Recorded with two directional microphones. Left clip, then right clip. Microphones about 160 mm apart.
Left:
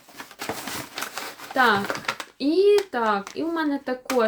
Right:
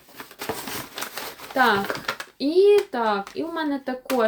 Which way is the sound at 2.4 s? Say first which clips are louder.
Right 2 dB; 5° right (ahead or behind).